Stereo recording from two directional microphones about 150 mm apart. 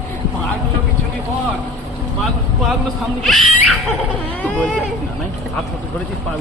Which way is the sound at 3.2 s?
Centre (ahead or behind).